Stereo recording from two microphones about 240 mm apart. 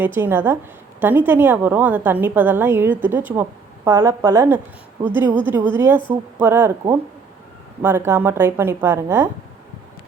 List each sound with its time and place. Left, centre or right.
0.0 s a woman's voice: centre
7.8 s a woman's voice: centre